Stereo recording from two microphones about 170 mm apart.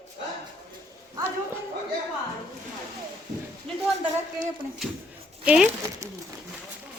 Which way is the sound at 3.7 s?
5° left (ahead or behind).